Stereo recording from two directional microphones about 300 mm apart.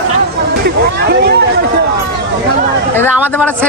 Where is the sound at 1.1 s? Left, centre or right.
Right.